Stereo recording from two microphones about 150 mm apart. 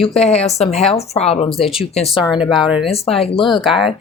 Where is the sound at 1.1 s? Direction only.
45° left (ahead or behind).